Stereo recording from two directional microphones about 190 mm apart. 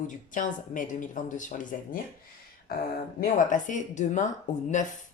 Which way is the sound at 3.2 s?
40° left (ahead or behind).